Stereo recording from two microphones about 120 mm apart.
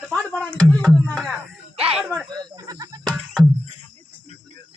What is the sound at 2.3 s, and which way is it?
Snake, 30° right (ahead or behind).